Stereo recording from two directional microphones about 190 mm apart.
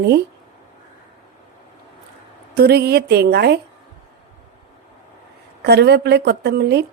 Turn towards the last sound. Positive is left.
turn(degrees=-60)  # may be behind; listen again after turning